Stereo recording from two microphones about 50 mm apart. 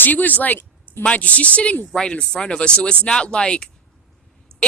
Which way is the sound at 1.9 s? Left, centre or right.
Centre.